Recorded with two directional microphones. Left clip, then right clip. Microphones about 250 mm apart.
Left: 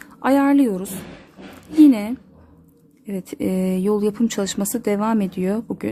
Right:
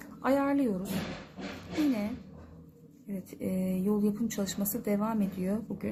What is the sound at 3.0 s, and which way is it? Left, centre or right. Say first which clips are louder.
A woman's voice: left 12 dB; left.